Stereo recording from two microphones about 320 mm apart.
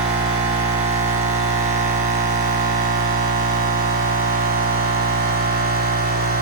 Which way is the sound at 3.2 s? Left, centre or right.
Right.